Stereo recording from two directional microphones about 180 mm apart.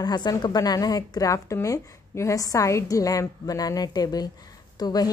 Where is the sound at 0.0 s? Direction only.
20° left (ahead or behind).